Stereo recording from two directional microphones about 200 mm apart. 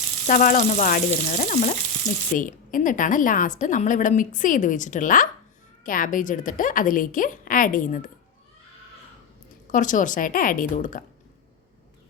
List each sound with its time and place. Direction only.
0.3 s a woman's voice: 40° left (ahead or behind)
2.0 s speech: 20° left (ahead or behind)
2.4 s a woman's voice: 40° left (ahead or behind)
9.7 s a woman's voice: 40° left (ahead or behind)